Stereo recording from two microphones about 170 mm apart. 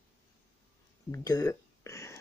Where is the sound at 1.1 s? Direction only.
20° left (ahead or behind).